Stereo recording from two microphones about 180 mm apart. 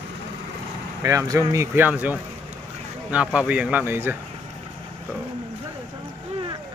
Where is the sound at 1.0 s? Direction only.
20° right (ahead or behind).